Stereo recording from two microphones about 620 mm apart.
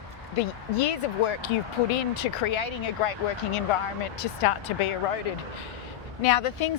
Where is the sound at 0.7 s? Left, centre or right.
Left.